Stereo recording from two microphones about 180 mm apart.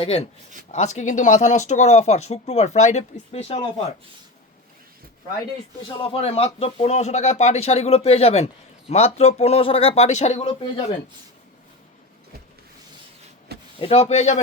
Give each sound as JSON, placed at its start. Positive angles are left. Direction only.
{"t": 0.0, "sound": "speech", "side_deg": 30}
{"t": 6.0, "sound": "speech", "side_deg": 30}
{"t": 13.7, "sound": "speech", "side_deg": 35}